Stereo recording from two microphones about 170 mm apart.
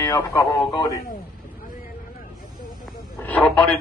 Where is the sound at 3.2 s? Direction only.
10° left (ahead or behind).